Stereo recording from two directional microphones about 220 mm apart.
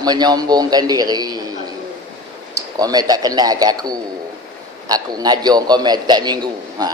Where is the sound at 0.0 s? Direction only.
20° right (ahead or behind).